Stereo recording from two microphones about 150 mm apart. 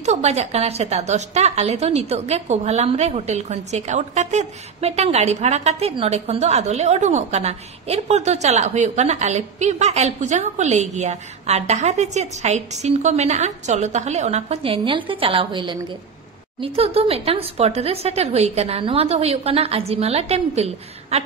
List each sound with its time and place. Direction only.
0.0 s a woman's voice: 50° right (ahead or behind)